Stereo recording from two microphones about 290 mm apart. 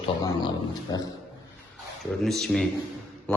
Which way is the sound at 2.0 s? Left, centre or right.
Centre.